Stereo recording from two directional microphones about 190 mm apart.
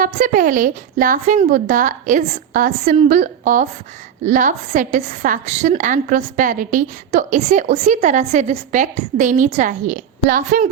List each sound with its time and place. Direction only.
0.0 s a woman's voice: 45° right (ahead or behind)